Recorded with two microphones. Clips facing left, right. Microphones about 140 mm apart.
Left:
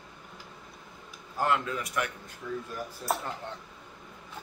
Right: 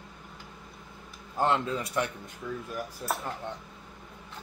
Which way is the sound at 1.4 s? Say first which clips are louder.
Right 2 dB; 25° right (ahead or behind).